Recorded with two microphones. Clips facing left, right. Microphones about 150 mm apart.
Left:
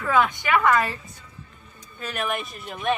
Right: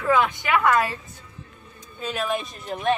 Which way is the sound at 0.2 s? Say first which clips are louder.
Left 1 dB; centre (ahead or behind).